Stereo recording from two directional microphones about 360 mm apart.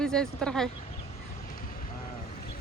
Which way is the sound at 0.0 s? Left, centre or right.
Centre.